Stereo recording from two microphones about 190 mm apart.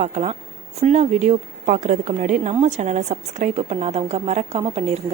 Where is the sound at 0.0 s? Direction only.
35° right (ahead or behind).